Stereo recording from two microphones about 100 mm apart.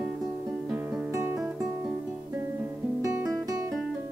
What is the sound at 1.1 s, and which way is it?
Music, 30° right (ahead or behind).